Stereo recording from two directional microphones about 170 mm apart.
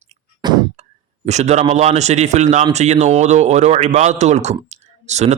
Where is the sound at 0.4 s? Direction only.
25° right (ahead or behind).